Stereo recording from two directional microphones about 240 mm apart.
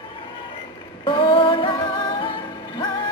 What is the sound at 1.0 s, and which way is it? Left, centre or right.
Music, centre.